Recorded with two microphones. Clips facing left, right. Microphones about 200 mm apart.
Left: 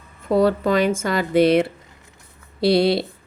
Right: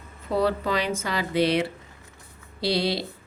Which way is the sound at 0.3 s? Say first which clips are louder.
Left 7 dB; 45° left (ahead or behind).